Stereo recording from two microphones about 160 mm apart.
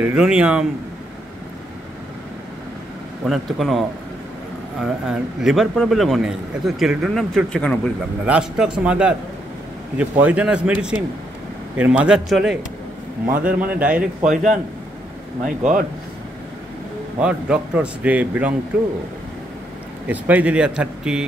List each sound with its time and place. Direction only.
0.0 s a man's voice: 5° right (ahead or behind)
3.3 s a man's voice: centre (ahead or behind)
8.3 s a man's voice: 5° right (ahead or behind)
13.3 s a man's voice: 60° right (ahead or behind)
13.7 s a man's voice: 10° right (ahead or behind)
14.3 s speech: 50° right (ahead or behind)
17.2 s a man's voice: 5° right (ahead or behind)
20.1 s a man's voice: 10° right (ahead or behind)